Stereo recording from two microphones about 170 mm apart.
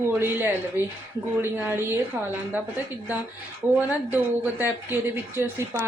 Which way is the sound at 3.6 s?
10° right (ahead or behind).